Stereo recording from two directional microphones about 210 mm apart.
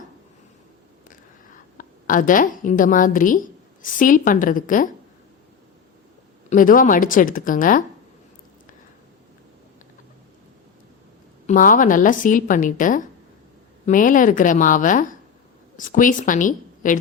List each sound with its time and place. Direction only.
1.8 s a woman's voice: 40° left (ahead or behind)
6.5 s a woman's voice: 40° left (ahead or behind)
11.4 s a woman's voice: 40° left (ahead or behind)